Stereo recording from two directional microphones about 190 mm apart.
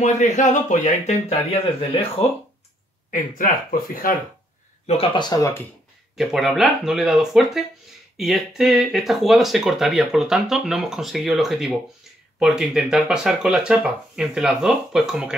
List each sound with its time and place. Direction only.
0.0 s speech: 40° left (ahead or behind)
3.1 s speech: 50° left (ahead or behind)
4.8 s speech: 30° left (ahead or behind)
6.1 s speech: centre (ahead or behind)